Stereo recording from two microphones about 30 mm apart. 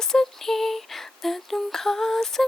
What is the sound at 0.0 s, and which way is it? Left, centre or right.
Female singing, centre.